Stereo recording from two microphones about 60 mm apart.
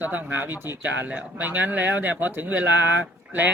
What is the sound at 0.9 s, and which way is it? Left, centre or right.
Speech, right.